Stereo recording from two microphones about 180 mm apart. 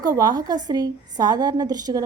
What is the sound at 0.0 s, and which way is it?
A woman's voice, 20° right (ahead or behind).